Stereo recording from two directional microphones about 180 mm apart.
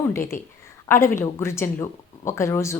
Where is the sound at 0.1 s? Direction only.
15° left (ahead or behind).